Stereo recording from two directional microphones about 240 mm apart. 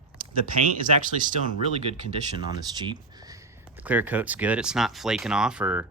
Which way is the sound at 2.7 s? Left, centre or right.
Centre.